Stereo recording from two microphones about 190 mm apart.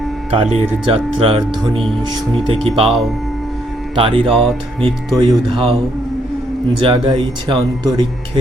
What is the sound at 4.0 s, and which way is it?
Speech, 30° right (ahead or behind).